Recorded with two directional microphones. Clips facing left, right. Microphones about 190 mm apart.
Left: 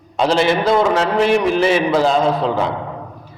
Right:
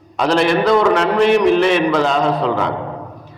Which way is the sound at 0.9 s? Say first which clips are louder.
Right 2 dB; 5° left (ahead or behind).